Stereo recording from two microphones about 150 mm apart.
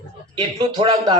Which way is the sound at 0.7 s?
30° right (ahead or behind).